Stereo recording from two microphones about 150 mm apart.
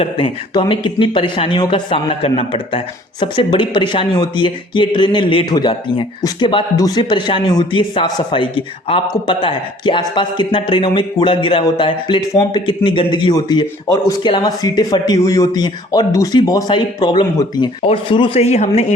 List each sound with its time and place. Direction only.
0.0 s speech: 35° left (ahead or behind)